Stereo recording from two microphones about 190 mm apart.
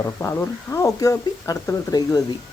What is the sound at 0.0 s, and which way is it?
Speech, 15° left (ahead or behind).